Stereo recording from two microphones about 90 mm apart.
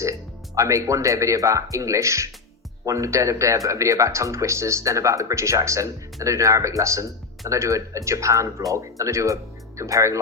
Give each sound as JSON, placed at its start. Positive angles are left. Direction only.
{"t": 0.0, "sound": "speech", "side_deg": -35}